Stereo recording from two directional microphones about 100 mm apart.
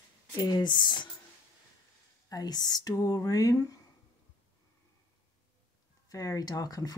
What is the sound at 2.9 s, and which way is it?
Speech, 35° left (ahead or behind).